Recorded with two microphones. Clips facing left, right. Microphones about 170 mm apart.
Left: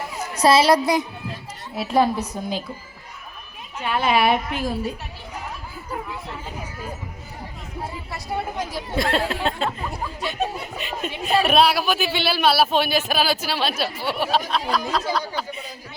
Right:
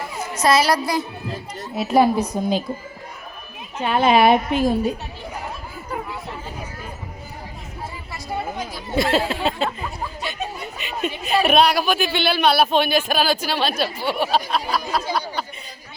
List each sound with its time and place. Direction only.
0.3 s a woman's voice: 30° left (ahead or behind)
1.7 s a woman's voice: centre (ahead or behind); by 2.6 s 15° right (ahead or behind)
3.8 s a woman's voice: 30° right (ahead or behind)
9.0 s speech: centre (ahead or behind)
10.8 s speech: centre (ahead or behind)